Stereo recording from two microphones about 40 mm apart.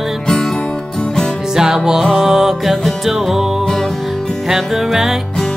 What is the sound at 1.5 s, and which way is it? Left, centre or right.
Music, centre.